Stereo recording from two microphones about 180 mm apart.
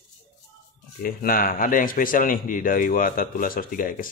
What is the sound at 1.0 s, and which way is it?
A man's voice, 55° left (ahead or behind).